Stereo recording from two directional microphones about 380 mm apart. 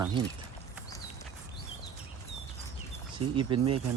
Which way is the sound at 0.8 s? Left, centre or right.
Centre.